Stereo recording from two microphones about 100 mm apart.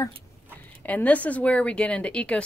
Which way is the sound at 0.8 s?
15° left (ahead or behind).